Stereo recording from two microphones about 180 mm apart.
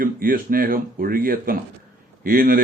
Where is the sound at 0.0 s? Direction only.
55° right (ahead or behind).